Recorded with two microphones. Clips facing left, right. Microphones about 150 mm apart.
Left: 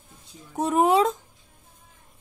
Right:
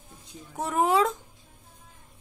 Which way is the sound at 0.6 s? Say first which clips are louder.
Left 4 dB; 20° left (ahead or behind).